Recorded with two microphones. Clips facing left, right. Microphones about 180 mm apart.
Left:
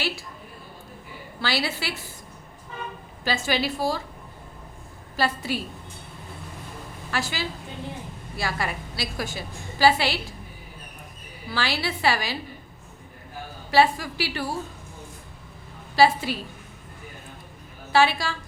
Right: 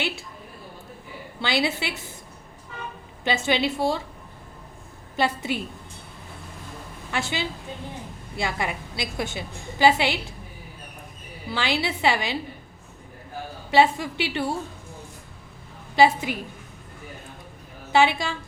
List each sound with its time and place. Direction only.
1.4 s a woman's voice: 20° right (ahead or behind)
3.2 s a woman's voice: 25° right (ahead or behind)
5.1 s a woman's voice: 20° right (ahead or behind)
7.1 s a woman's voice: 25° right (ahead or behind)
11.5 s a woman's voice: 20° right (ahead or behind)
13.7 s a woman's voice: 20° right (ahead or behind)
16.0 s a woman's voice: 20° right (ahead or behind)
17.9 s a woman's voice: 20° right (ahead or behind)